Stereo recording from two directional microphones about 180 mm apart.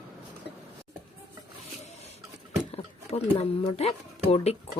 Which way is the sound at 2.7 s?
35° left (ahead or behind).